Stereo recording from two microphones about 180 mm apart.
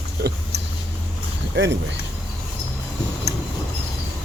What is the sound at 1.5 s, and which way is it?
Speech, 80° right.